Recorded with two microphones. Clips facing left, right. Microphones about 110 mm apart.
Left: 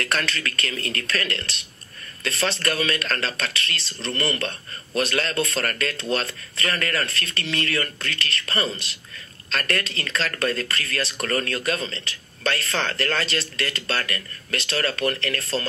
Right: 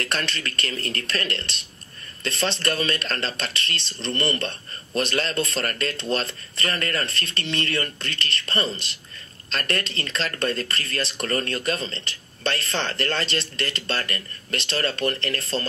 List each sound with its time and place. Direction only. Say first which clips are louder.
0.0 s speech: left 2 dB; 30° right (ahead or behind)